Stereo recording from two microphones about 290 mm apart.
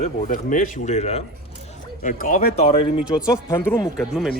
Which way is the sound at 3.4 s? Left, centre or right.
Centre.